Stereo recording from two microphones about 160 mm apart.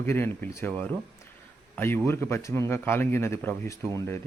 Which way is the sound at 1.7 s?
15° left (ahead or behind).